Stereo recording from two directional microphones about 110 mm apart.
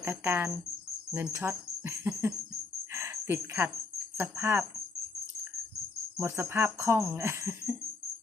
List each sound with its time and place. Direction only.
0.0 s speech: 20° right (ahead or behind)
2.9 s a sound: 25° right (ahead or behind)
4.2 s speech: 20° right (ahead or behind)
6.1 s speech: 25° right (ahead or behind)